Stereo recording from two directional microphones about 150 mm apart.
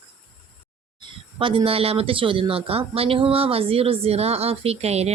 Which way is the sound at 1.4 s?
35° right (ahead or behind).